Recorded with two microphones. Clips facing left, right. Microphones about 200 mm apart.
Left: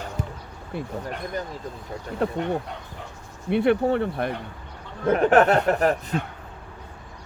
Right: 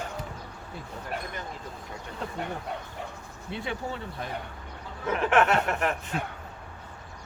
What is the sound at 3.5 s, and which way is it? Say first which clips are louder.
Speech: left 14 dB; 60° left (ahead or behind).